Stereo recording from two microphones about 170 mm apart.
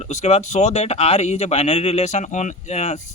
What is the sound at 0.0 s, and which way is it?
Speech, 40° left (ahead or behind).